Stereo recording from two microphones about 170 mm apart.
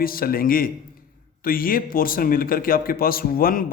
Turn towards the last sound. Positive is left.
turn(degrees=55)  # may be behind; listen again after turning